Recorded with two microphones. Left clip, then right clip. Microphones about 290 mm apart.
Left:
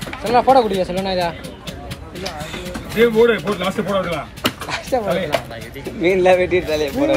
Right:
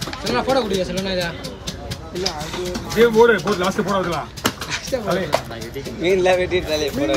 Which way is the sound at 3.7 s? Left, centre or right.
Centre.